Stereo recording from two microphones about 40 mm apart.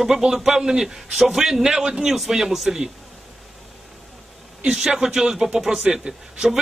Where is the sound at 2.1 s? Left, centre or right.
Centre.